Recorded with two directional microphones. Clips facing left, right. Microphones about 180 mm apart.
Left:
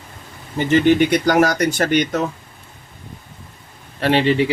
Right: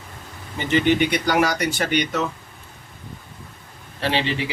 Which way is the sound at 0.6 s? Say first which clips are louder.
Left 5 dB; 45° left (ahead or behind).